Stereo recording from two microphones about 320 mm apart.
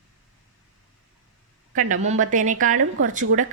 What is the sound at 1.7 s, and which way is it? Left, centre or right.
A woman's voice, right.